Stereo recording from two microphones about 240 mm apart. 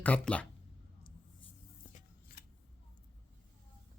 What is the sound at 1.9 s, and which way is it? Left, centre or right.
Scissors, left.